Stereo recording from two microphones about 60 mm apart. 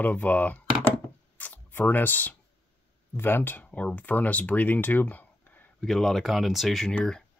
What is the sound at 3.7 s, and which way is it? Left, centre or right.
Speech, left.